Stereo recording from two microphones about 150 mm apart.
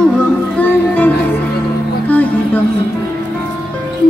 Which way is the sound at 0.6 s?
10° left (ahead or behind).